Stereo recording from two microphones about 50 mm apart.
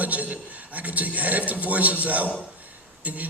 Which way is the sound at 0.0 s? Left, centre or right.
Right.